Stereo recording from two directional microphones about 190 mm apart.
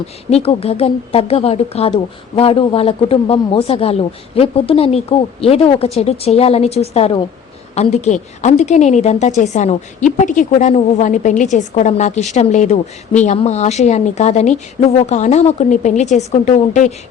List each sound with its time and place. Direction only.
0.3 s a woman's voice: 30° left (ahead or behind)